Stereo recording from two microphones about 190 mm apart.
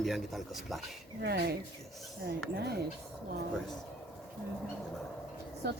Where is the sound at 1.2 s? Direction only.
60° right (ahead or behind).